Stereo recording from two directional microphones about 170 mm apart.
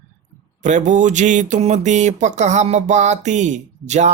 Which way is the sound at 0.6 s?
45° right (ahead or behind).